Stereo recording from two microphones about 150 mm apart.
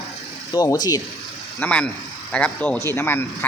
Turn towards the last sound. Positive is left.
turn(degrees=15)  # may be behind; listen again after turning